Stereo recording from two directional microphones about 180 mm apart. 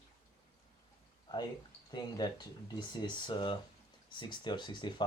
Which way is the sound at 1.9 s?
25° left (ahead or behind).